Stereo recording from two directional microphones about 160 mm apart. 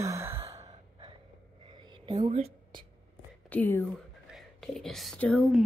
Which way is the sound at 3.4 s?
10° left (ahead or behind).